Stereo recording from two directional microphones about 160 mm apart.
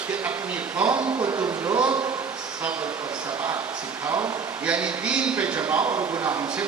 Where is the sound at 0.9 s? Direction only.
30° right (ahead or behind).